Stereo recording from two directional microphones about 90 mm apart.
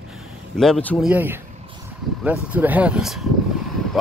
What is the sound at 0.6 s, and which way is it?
Speech, 5° left (ahead or behind).